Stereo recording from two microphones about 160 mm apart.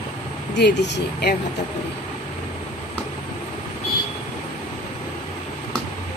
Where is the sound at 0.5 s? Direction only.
90° left.